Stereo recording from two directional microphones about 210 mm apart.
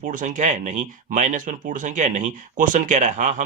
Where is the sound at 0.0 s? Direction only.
40° right (ahead or behind).